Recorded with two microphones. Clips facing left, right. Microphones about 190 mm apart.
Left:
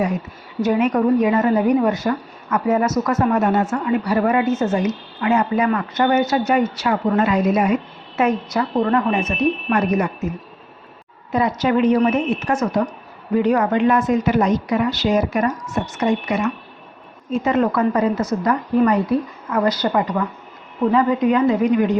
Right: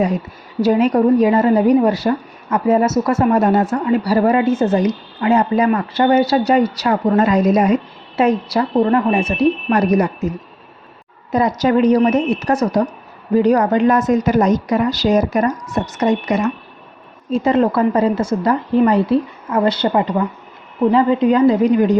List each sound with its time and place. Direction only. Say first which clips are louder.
0.6 s a woman's voice: right 4 dB; 35° right (ahead or behind)